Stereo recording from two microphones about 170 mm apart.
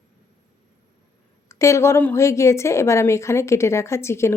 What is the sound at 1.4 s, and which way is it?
A woman's voice, 15° left (ahead or behind).